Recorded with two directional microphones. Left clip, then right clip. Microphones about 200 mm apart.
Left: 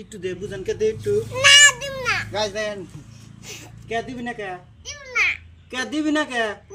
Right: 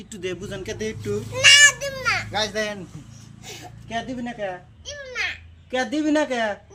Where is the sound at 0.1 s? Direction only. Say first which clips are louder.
Left 1 dB; 60° right (ahead or behind).